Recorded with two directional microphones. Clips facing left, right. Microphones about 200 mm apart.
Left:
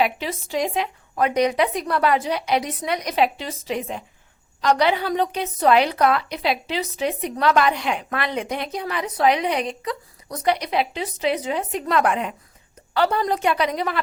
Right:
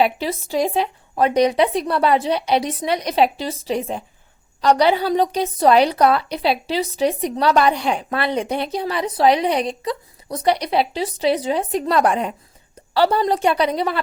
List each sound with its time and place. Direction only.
0.0 s a woman's voice: 35° right (ahead or behind)